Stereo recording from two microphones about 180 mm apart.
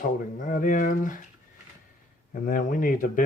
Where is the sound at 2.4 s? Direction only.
50° left (ahead or behind).